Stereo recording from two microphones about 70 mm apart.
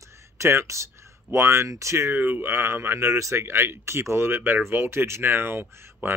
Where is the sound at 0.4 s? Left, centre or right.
Right.